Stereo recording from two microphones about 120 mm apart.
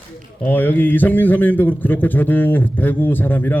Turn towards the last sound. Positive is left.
turn(degrees=15)  # may be behind; listen again after turning